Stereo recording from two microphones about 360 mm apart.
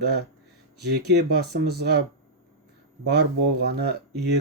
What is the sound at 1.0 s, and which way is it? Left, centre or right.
Speech, right.